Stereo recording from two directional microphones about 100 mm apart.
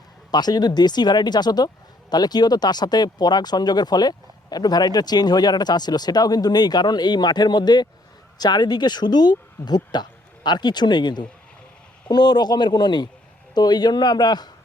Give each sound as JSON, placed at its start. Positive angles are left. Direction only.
{"t": 0.3, "sound": "speech", "side_deg": 45}